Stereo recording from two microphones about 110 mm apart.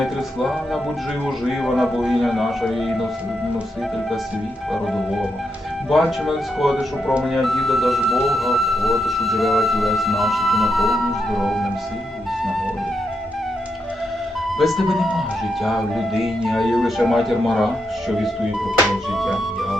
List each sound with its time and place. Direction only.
0.0 s music: centre (ahead or behind)
1.5 s speech: centre (ahead or behind)
4.7 s speech: centre (ahead or behind)
14.6 s speech: centre (ahead or behind)